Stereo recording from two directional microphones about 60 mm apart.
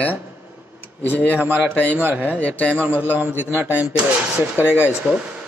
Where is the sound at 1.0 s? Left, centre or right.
Left.